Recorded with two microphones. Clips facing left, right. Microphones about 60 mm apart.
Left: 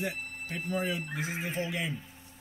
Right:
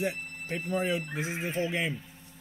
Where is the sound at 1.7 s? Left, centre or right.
Right.